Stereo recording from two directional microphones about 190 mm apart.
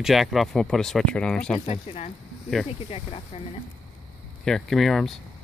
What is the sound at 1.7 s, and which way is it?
Speech, 35° left (ahead or behind).